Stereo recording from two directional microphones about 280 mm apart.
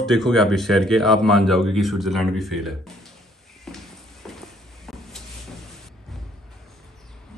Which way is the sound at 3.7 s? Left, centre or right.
Centre.